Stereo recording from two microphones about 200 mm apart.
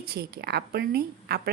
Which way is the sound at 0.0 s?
50° right (ahead or behind).